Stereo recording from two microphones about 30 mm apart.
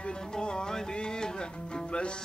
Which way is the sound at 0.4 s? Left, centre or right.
Left.